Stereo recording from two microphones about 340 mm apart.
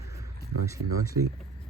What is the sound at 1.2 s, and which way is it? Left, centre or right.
Speech, right.